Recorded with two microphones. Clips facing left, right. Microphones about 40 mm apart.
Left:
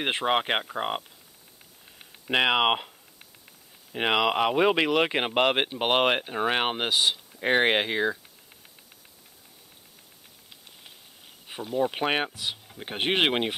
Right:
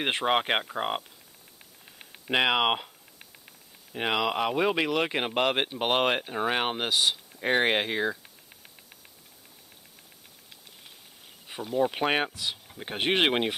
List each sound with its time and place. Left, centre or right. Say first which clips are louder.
0.0 s speech: even; centre
2.2 s speech: left 2 dB; centre
3.9 s speech: left 3 dB; left
11.4 s speech: even; centre